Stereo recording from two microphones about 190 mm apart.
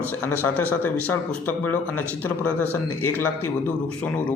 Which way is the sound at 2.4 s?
10° left (ahead or behind).